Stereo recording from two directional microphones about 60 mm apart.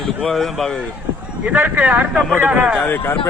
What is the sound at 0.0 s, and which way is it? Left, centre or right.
Speech, centre.